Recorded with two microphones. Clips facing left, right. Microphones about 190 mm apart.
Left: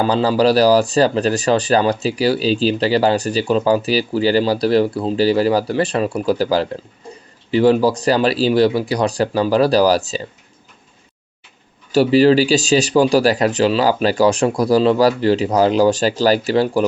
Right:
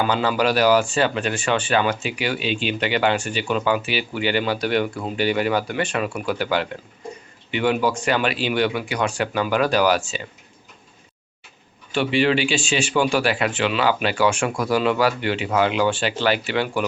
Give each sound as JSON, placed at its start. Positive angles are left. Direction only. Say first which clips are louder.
{"t": 0.0, "sound": "speech", "louder": "left 6 dB", "side_deg": 35}
{"t": 11.9, "sound": "speech", "louder": "left 8 dB", "side_deg": 40}